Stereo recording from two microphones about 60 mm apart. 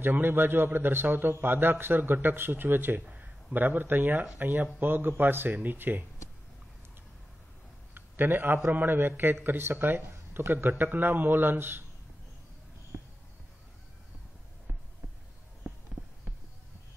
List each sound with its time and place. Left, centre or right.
0.0 s a man's voice: right
7.9 s a man's voice: right